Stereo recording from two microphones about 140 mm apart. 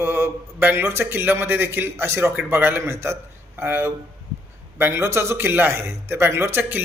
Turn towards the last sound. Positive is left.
turn(degrees=-15)  # may be behind; listen again after turning